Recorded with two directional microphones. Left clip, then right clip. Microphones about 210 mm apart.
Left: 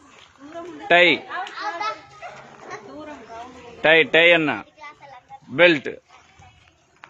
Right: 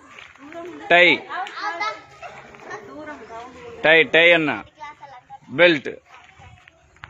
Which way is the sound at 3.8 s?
5° left (ahead or behind).